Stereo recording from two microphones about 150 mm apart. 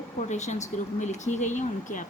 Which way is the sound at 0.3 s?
50° left (ahead or behind).